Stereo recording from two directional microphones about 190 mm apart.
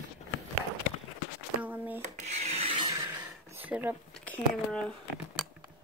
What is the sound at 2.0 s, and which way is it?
Rub, 35° right (ahead or behind).